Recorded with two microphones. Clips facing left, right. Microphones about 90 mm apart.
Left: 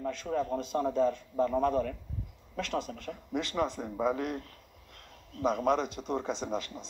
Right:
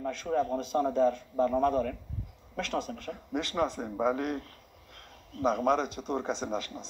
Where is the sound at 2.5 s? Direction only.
50° right (ahead or behind).